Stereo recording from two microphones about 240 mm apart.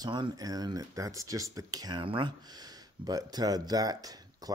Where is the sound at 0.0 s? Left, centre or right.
Centre.